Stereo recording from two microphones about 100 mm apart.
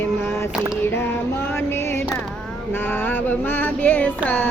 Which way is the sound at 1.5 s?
25° left (ahead or behind).